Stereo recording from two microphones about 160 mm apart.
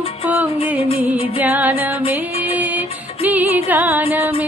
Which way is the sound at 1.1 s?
35° left (ahead or behind).